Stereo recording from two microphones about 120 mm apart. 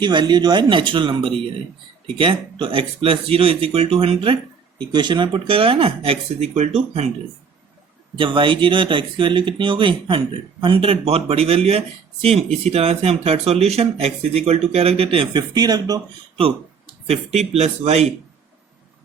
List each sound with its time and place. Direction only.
0.0 s speech: 40° right (ahead or behind)
4.9 s speech: 40° right (ahead or behind); by 7.1 s 65° right (ahead or behind)
8.2 s speech: 45° right (ahead or behind)
16.4 s speech: 55° right (ahead or behind)